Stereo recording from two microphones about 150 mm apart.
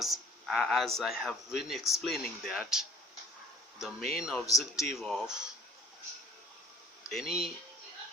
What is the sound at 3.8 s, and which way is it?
A man's voice, centre (ahead or behind).